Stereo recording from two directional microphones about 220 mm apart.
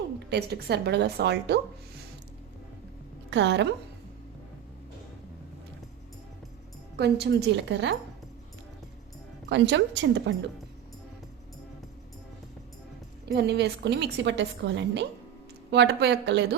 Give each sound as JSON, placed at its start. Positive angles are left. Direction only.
{"t": 0.3, "sound": "a woman's voice", "side_deg": -50}
{"t": 3.2, "sound": "a woman's voice", "side_deg": -55}
{"t": 6.9, "sound": "a woman's voice", "side_deg": -50}
{"t": 9.5, "sound": "a woman's voice", "side_deg": -55}
{"t": 13.2, "sound": "a woman's voice", "side_deg": -50}